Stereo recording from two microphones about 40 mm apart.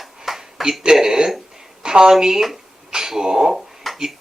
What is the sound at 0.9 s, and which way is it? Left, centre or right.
A woman's voice, centre.